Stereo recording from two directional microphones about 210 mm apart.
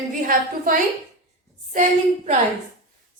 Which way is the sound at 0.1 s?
40° right (ahead or behind).